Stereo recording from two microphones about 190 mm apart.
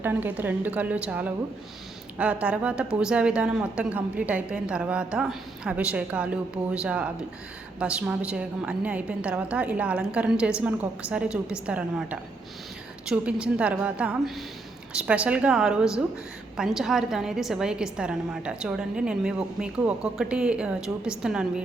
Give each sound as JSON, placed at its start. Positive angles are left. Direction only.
{"t": 0.0, "sound": "a woman's voice", "side_deg": -10}